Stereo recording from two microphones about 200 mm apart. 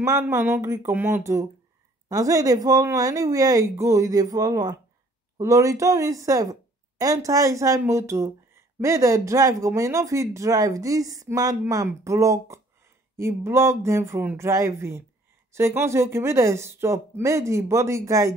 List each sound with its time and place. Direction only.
0.0 s a woman's voice: 15° right (ahead or behind)